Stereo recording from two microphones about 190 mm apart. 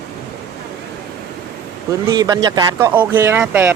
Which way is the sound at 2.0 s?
20° right (ahead or behind).